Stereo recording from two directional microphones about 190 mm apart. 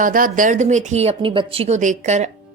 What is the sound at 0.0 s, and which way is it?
Speech, 45° right (ahead or behind).